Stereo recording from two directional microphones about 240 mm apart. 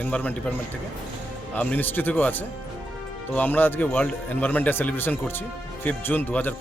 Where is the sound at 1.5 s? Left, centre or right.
Centre.